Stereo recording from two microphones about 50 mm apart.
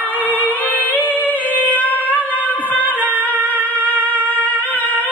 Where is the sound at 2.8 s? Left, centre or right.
Right.